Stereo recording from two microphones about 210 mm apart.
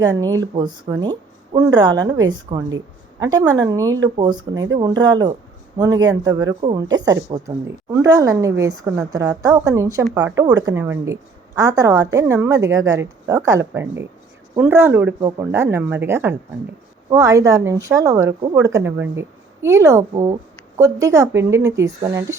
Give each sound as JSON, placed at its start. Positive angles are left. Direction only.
{"t": 0.0, "sound": "a woman's voice", "side_deg": -20}